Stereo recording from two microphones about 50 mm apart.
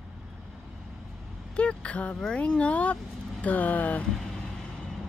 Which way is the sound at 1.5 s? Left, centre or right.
Left.